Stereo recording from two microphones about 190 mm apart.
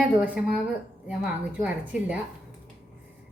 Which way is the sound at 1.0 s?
5° right (ahead or behind).